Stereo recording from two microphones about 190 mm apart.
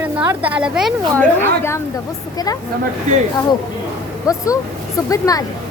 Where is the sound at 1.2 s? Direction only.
15° left (ahead or behind).